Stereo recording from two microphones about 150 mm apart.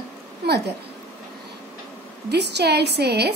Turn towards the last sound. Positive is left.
turn(degrees=-90)